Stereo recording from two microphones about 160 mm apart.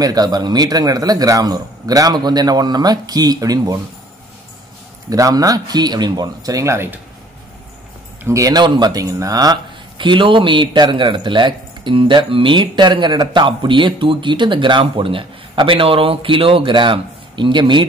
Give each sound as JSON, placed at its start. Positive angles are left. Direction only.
{"t": 0.0, "sound": "a man's voice", "side_deg": -25}
{"t": 5.1, "sound": "a man's voice", "side_deg": -20}
{"t": 8.2, "sound": "speech", "side_deg": -20}